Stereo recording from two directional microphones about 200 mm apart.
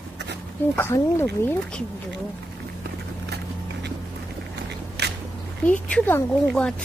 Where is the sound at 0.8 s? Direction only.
10° left (ahead or behind).